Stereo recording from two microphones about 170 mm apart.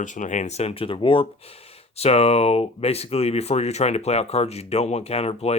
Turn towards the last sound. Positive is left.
turn(degrees=35)  # may be behind; listen again after turning